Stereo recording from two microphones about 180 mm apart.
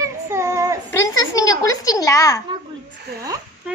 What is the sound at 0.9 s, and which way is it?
Speech, 20° left (ahead or behind).